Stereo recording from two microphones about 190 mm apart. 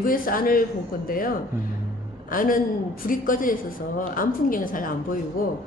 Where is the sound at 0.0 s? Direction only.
50° left (ahead or behind).